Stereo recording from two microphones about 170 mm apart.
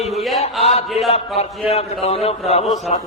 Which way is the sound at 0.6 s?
35° left (ahead or behind).